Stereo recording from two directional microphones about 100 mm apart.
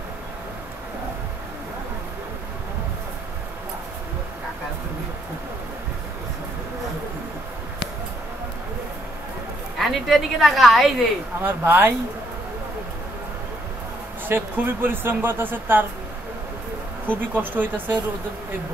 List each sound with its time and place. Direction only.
9.8 s a woman's voice: centre (ahead or behind)
11.4 s speech: 20° right (ahead or behind)
14.2 s speech: 20° right (ahead or behind)
17.1 s speech: 20° right (ahead or behind)